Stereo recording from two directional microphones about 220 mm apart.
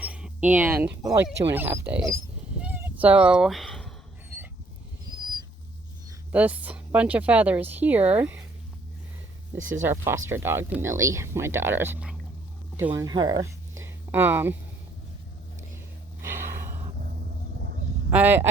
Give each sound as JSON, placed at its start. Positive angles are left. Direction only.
{"t": 0.0, "sound": "speech", "side_deg": -5}
{"t": 2.6, "sound": "cat", "side_deg": -5}
{"t": 6.3, "sound": "speech", "side_deg": -5}
{"t": 9.8, "sound": "speech", "side_deg": -10}
{"t": 12.9, "sound": "speech", "side_deg": -20}
{"t": 13.8, "sound": "a sound", "side_deg": -10}
{"t": 18.1, "sound": "speech", "side_deg": -10}